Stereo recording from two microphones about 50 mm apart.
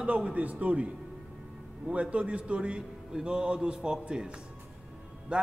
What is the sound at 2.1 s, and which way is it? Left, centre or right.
A man's voice, right.